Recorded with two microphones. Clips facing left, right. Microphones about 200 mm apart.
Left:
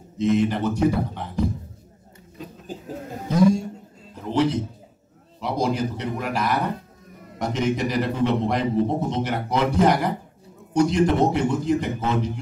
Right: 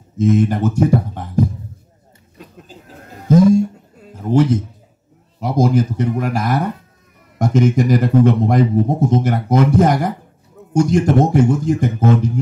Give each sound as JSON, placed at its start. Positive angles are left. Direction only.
{"t": 0.2, "sound": "a man's voice", "side_deg": -45}
{"t": 3.3, "sound": "a man's voice", "side_deg": -45}
{"t": 4.0, "sound": "a sound", "side_deg": -45}
{"t": 5.4, "sound": "a man's voice", "side_deg": -45}